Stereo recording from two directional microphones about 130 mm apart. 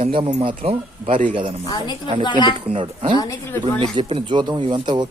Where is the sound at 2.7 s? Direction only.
45° right (ahead or behind).